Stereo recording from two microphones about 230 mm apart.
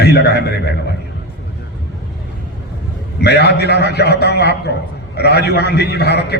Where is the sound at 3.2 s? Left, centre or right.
Left.